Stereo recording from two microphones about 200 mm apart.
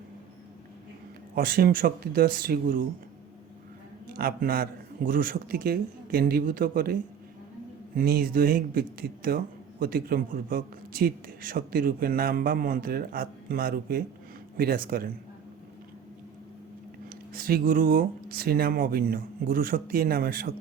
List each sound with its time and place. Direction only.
1.4 s speech: 50° right (ahead or behind)
4.0 s speech: 50° right (ahead or behind)
17.1 s speech: 45° right (ahead or behind)